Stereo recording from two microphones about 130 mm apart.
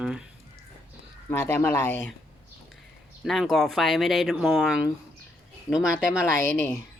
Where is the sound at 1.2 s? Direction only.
15° left (ahead or behind).